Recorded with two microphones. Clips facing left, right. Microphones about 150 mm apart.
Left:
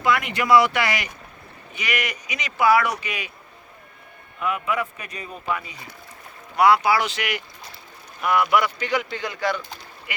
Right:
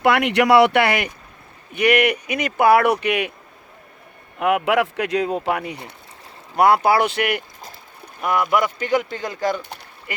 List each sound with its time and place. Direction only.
0.0 s speech: 65° right (ahead or behind)
4.4 s speech: 70° right (ahead or behind)
6.6 s speech: 50° right (ahead or behind)
8.2 s speech: 45° right (ahead or behind)